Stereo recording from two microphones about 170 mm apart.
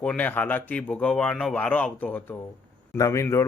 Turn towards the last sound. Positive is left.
turn(degrees=15)  # may be behind; listen again after turning